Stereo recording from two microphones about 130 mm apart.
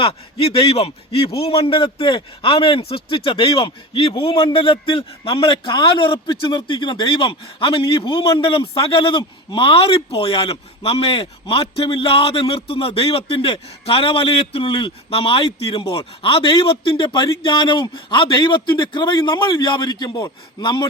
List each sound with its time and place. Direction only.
0.0 s a man's voice: 45° left (ahead or behind)